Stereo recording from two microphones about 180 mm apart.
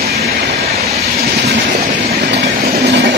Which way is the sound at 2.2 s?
65° right (ahead or behind).